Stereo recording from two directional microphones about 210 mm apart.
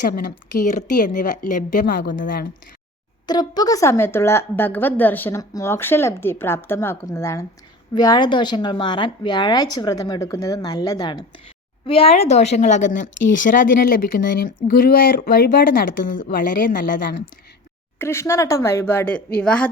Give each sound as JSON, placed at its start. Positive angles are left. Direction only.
{"t": 0.1, "sound": "a woman's voice", "side_deg": 40}
{"t": 3.2, "sound": "a woman's voice", "side_deg": 20}
{"t": 18.0, "sound": "a woman's voice", "side_deg": 10}